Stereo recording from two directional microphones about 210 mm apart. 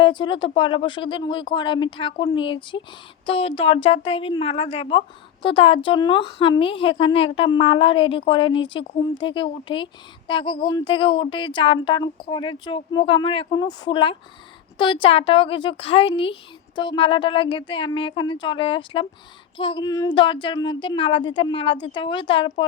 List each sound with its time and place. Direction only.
0.0 s a woman's voice: 25° left (ahead or behind)